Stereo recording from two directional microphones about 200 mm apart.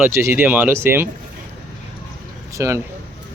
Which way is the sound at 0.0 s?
15° right (ahead or behind).